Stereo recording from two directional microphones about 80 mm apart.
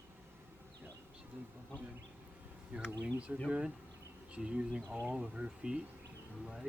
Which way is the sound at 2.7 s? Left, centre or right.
Centre.